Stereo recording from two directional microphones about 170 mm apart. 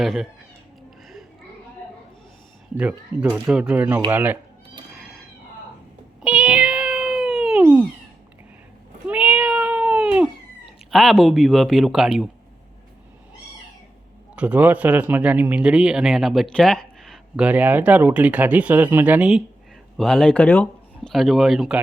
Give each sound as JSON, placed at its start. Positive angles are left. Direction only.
{"t": 0.0, "sound": "speech", "side_deg": 0}
{"t": 3.2, "sound": "speech", "side_deg": -5}
{"t": 4.9, "sound": "cat", "side_deg": 0}
{"t": 6.2, "sound": "cat", "side_deg": -5}
{"t": 9.0, "sound": "cat", "side_deg": -5}
{"t": 10.9, "sound": "speech", "side_deg": 0}
{"t": 14.3, "sound": "speech", "side_deg": -10}
{"t": 20.0, "sound": "speech", "side_deg": 5}